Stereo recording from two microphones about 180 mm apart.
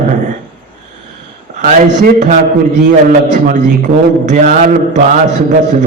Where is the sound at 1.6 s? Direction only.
50° right (ahead or behind).